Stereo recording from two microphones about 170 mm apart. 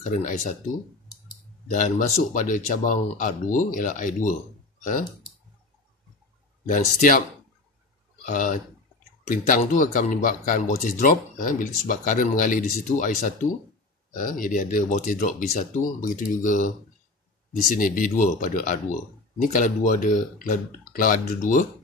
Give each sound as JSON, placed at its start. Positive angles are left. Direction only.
{"t": 0.0, "sound": "speech", "side_deg": 45}
{"t": 1.7, "sound": "speech", "side_deg": 50}
{"t": 6.6, "sound": "speech", "side_deg": 50}
{"t": 8.3, "sound": "speech", "side_deg": 50}
{"t": 17.7, "sound": "speech", "side_deg": 50}